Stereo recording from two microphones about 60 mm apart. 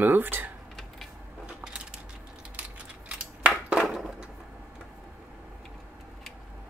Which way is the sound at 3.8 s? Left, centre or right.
Centre.